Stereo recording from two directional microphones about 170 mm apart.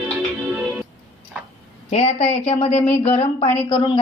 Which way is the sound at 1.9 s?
40° left (ahead or behind).